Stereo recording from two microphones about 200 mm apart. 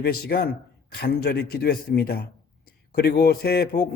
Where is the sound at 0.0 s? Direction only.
55° left (ahead or behind).